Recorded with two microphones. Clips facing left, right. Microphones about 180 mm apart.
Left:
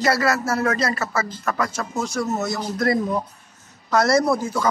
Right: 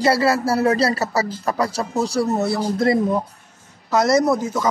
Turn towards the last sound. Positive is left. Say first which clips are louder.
# right 2 dB
turn(degrees=-20)  # may be behind; listen again after turning